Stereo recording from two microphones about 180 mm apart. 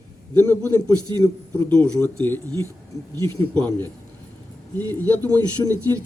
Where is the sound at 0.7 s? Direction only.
20° left (ahead or behind).